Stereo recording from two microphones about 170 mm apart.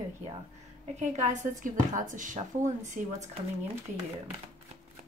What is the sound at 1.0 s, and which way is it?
Speech, 45° right (ahead or behind).